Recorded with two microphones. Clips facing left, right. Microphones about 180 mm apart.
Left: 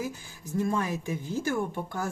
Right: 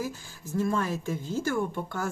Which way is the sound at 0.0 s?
15° left (ahead or behind).